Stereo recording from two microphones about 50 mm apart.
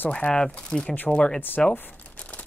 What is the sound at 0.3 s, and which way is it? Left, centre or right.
Speech, centre.